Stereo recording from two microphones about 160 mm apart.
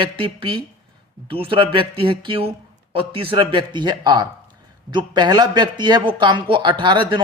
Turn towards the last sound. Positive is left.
turn(degrees=-30)  # may be behind; listen again after turning